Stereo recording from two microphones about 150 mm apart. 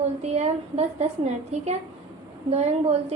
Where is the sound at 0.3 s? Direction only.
45° right (ahead or behind).